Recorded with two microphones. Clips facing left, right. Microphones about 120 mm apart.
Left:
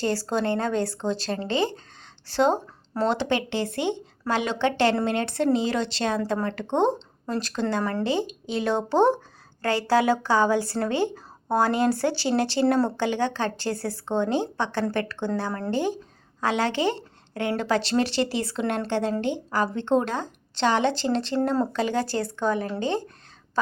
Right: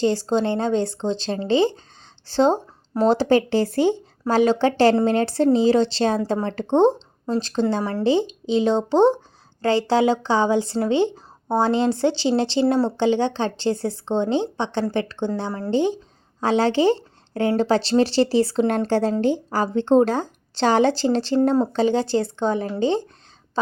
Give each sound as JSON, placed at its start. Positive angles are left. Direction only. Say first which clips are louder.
{"t": 0.0, "sound": "a woman's voice", "louder": "right 5 dB", "side_deg": -20}